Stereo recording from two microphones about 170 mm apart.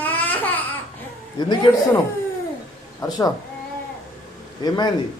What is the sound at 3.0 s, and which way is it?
Speech, 20° left (ahead or behind).